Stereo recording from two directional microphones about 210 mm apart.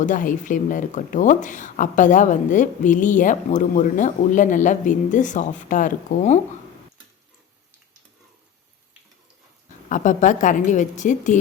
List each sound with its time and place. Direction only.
0.0 s speech: 40° left (ahead or behind)
9.9 s speech: 35° left (ahead or behind)